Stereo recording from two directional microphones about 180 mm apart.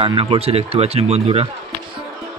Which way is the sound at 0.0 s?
30° right (ahead or behind).